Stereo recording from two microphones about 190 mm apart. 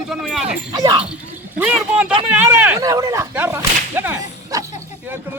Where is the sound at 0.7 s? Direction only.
20° right (ahead or behind).